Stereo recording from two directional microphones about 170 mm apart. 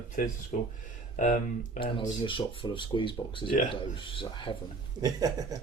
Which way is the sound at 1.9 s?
30° left (ahead or behind).